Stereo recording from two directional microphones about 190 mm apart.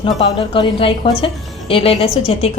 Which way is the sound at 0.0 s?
30° left (ahead or behind).